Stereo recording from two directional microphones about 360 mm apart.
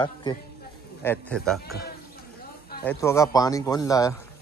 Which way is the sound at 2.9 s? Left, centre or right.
Centre.